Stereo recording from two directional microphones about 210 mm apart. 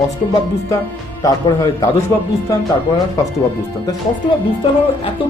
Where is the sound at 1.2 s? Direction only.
15° left (ahead or behind).